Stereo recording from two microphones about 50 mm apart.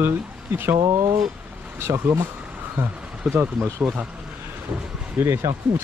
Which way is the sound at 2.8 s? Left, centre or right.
Right.